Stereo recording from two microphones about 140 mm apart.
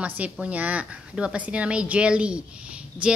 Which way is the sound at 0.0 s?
10° right (ahead or behind).